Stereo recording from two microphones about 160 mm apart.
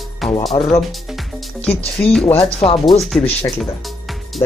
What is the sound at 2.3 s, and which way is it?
Speech, 40° left (ahead or behind).